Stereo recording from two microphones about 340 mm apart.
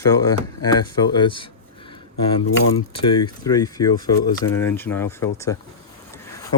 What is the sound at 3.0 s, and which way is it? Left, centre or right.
Speech, centre.